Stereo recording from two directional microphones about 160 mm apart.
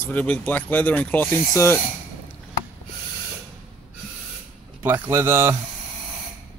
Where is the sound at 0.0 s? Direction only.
10° left (ahead or behind).